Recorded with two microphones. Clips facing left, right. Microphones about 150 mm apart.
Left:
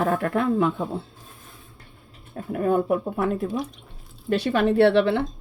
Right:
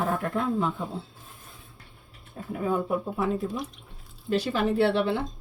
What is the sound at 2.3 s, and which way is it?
Speech, 60° left (ahead or behind).